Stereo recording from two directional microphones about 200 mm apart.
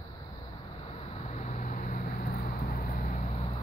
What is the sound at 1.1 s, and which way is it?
Vehicle, 35° left (ahead or behind).